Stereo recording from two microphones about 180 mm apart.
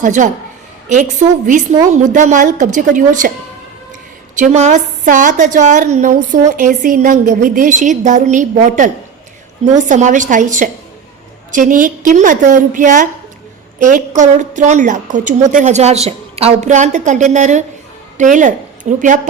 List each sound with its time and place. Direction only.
0.0 s a woman's voice: 45° right (ahead or behind)
1.5 s a woman's voice: 45° right (ahead or behind)
4.4 s a woman's voice: 40° right (ahead or behind)